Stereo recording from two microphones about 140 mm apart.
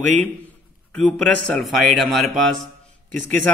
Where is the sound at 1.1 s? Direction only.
5° left (ahead or behind).